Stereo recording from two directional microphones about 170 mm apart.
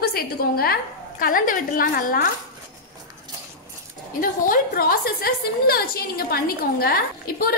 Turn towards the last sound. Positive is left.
turn(degrees=65)  # may be behind; listen again after turning